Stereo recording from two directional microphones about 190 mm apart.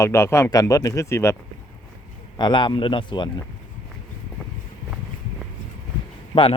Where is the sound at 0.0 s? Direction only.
15° left (ahead or behind).